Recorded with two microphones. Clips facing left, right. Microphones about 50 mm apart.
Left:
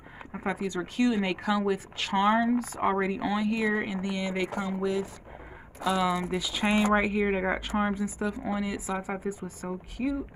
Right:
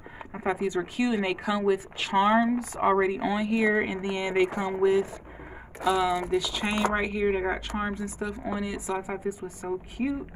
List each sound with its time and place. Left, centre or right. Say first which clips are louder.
0.3 s speech: right 4 dB; centre
3.7 s speech: right 3 dB; right
5.9 s speech: right 2 dB; centre
9.9 s speech: left 1 dB; centre